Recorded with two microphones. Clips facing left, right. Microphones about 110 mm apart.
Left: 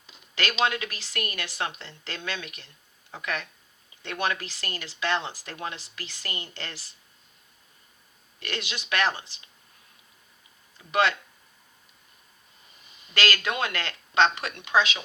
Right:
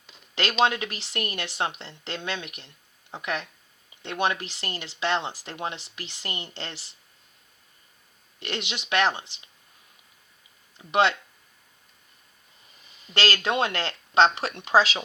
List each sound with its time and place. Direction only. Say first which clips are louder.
0.3 s speech: right 3 dB; 30° right (ahead or behind)
8.4 s speech: right 2 dB; 25° right (ahead or behind)
10.8 s speech: right 2 dB; 25° right (ahead or behind)
13.1 s speech: right 2 dB; 30° right (ahead or behind)